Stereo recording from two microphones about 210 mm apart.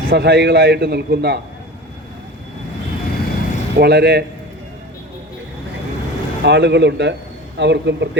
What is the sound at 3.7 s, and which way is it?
Speech, 50° right (ahead or behind).